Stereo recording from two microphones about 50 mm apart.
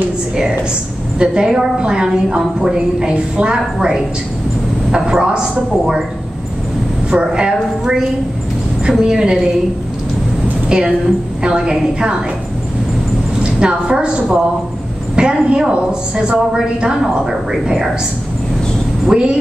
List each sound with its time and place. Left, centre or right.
1.2 s a woman's voice: centre
7.1 s a woman's voice: centre
10.7 s a woman's voice: centre
13.4 s a woman's voice: centre
19.0 s a woman's voice: centre